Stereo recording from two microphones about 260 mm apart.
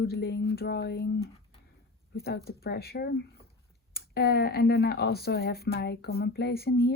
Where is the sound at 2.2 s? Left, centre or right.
Left.